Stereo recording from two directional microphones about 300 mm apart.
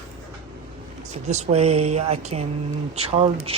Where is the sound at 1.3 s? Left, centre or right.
Right.